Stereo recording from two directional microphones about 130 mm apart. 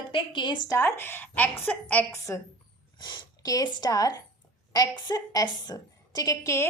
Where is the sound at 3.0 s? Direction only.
35° left (ahead or behind).